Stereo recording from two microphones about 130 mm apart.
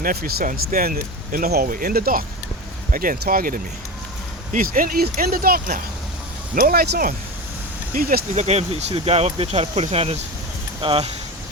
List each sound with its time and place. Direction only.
0.0 s speech: 90° right
7.9 s speech: 60° right (ahead or behind); by 11.1 s 45° right (ahead or behind)